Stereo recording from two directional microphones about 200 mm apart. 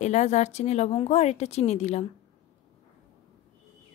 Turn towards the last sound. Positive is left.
turn(degrees=35)  # may be behind; listen again after turning